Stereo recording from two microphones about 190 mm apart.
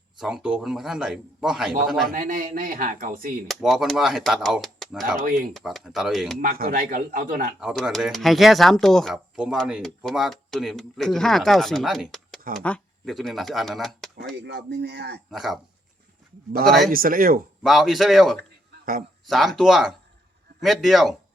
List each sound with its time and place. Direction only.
0.2 s speech: 5° right (ahead or behind)
2.1 s a man's voice: 45° right (ahead or behind)
3.4 s speech: centre (ahead or behind)
6.4 s a man's voice: 50° right (ahead or behind)
7.6 s speech: 5° right (ahead or behind)
14.3 s speech: 60° right (ahead or behind)
15.3 s speech: centre (ahead or behind)
16.6 s speech: centre (ahead or behind)
16.9 s a man's voice: 50° right (ahead or behind)
17.6 s speech: centre (ahead or behind)